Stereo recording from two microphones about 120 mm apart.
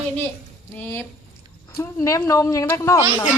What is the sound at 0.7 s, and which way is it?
A woman's voice, 15° left (ahead or behind).